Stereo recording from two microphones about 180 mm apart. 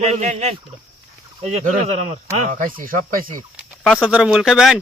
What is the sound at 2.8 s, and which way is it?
Speech, 50° right (ahead or behind).